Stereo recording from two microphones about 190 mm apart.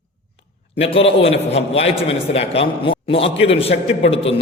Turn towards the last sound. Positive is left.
turn(degrees=30)  # may be behind; listen again after turning